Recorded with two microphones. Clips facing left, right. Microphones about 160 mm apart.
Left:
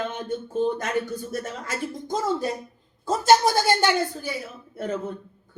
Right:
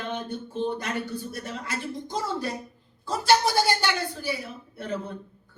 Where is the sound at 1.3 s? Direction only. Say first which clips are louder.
Left 3 dB; 45° left (ahead or behind).